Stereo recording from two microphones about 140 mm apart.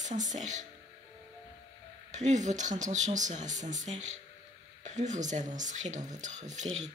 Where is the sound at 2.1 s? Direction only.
60° right (ahead or behind).